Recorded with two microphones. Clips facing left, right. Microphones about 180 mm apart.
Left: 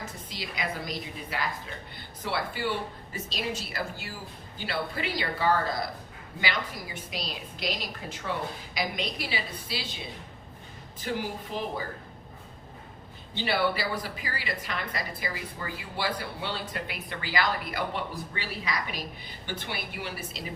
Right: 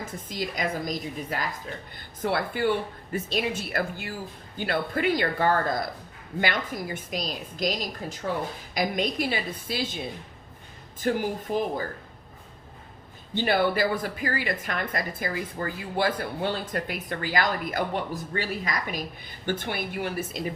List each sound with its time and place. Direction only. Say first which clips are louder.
0.0 s speech: right 6 dB; 45° right (ahead or behind)
13.3 s speech: right 4 dB; 50° right (ahead or behind)